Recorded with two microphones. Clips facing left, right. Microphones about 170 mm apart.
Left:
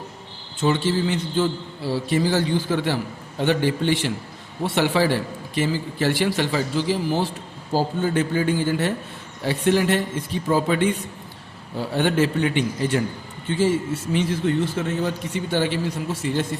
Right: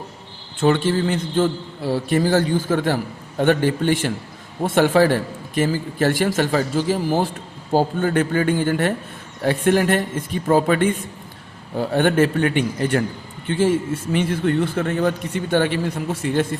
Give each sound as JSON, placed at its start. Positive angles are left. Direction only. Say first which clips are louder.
{"t": 0.6, "sound": "a man's voice", "louder": "right 3 dB", "side_deg": -55}
{"t": 7.7, "sound": "a man's voice", "louder": "right 3 dB", "side_deg": -60}